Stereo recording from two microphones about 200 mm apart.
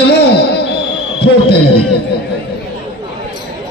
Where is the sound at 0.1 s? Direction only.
55° left (ahead or behind).